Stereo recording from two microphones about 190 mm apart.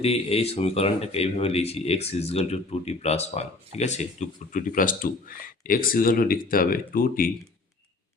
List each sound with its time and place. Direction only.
0.0 s speech: 30° left (ahead or behind); by 7.3 s 50° left (ahead or behind)